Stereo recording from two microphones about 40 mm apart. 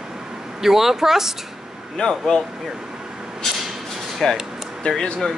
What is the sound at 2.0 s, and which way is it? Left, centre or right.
Speech, centre.